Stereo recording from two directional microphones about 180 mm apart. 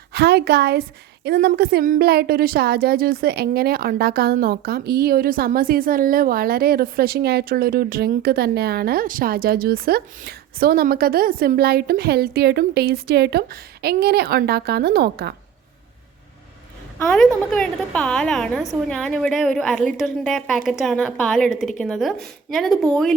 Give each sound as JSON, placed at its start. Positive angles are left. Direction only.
{"t": 0.1, "sound": "a woman's voice", "side_deg": -65}
{"t": 17.1, "sound": "a woman's voice", "side_deg": 5}